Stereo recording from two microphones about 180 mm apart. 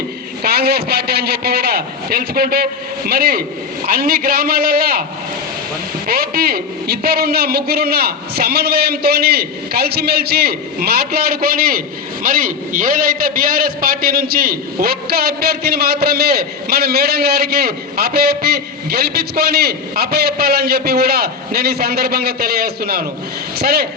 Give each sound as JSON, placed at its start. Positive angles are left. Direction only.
{"t": 0.4, "sound": "a man's voice", "side_deg": -60}
{"t": 6.1, "sound": "a man's voice", "side_deg": -60}